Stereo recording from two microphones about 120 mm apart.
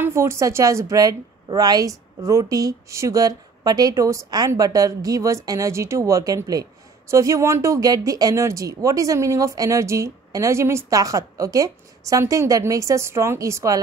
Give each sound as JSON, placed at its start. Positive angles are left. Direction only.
{"t": 0.0, "sound": "a woman's voice", "side_deg": -20}